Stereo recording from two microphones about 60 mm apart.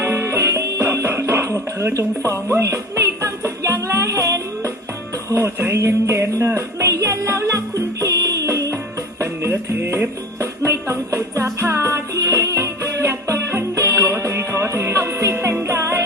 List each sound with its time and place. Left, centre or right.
0.0 s music: right
5.3 s music: right
5.7 s music: right
8.0 s music: right
8.4 s music: right
9.2 s music: right